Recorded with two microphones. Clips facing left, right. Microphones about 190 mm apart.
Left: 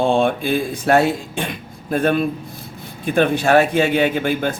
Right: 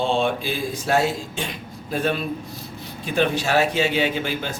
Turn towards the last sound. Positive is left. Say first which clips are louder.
# left 6 dB
turn(degrees=55)  # may be behind; listen again after turning